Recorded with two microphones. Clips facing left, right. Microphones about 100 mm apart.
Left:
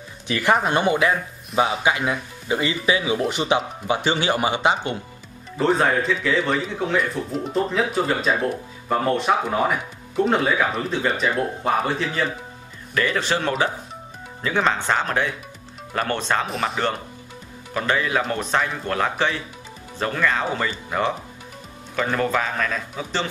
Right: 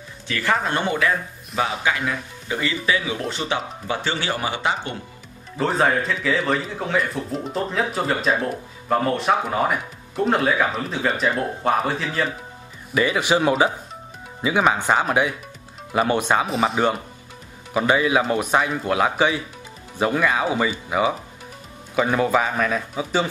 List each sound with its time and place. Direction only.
0.3 s speech: 20° left (ahead or behind)
5.6 s speech: centre (ahead or behind)
12.9 s speech: 10° right (ahead or behind)